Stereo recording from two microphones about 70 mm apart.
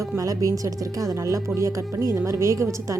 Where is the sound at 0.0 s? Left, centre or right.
Right.